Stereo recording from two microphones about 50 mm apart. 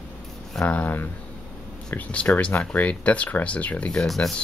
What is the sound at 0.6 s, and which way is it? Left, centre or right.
Speech, left.